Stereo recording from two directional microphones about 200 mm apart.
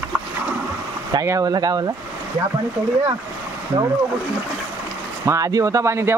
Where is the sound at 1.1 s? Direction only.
15° right (ahead or behind).